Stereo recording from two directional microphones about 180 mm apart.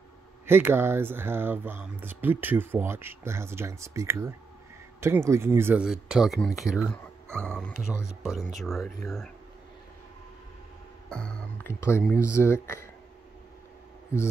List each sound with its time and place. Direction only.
0.5 s speech: 10° right (ahead or behind)
11.1 s speech: 5° left (ahead or behind)
12.1 s speech: 15° left (ahead or behind)
14.1 s speech: 15° left (ahead or behind)